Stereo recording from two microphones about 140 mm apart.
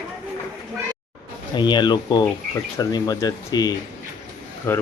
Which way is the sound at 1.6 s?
30° left (ahead or behind).